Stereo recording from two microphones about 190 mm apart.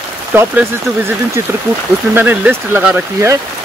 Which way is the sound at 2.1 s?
10° right (ahead or behind).